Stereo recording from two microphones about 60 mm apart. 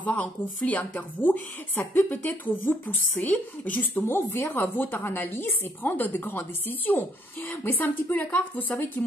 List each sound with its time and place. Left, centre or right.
0.0 s a woman's voice: left